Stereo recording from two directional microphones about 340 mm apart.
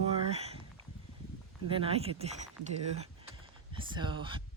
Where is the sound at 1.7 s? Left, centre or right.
Centre.